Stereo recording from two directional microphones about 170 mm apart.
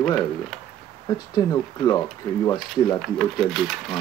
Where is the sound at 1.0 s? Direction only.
25° left (ahead or behind).